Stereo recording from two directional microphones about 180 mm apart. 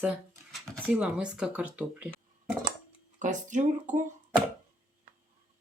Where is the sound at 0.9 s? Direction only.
5° right (ahead or behind).